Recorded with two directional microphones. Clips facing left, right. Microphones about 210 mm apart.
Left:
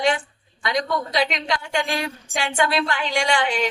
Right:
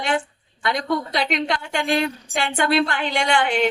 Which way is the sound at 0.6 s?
55° right (ahead or behind).